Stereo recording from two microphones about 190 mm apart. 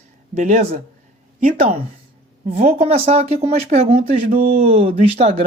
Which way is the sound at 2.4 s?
35° right (ahead or behind).